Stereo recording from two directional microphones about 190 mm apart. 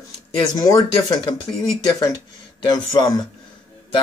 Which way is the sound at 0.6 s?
20° left (ahead or behind).